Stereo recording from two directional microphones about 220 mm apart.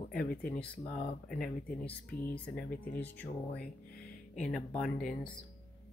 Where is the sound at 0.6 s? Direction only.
5° left (ahead or behind).